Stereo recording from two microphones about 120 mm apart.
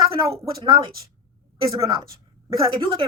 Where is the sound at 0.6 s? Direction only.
40° right (ahead or behind).